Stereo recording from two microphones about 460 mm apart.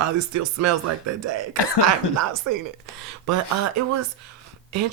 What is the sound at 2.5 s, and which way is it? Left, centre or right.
Speech, right.